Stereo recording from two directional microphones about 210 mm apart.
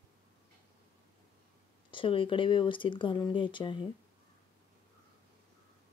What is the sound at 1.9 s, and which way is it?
Speech, 25° left (ahead or behind).